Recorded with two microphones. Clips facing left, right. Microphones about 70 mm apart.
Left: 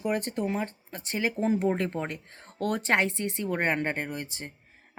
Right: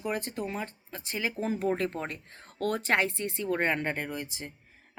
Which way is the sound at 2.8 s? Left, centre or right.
Left.